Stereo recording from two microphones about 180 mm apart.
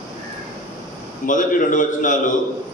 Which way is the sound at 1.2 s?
45° left (ahead or behind).